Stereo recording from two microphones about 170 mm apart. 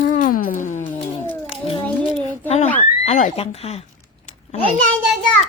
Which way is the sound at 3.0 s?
50° left (ahead or behind).